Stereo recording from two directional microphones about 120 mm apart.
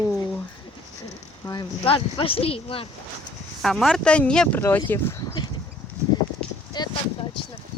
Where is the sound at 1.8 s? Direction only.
50° left (ahead or behind).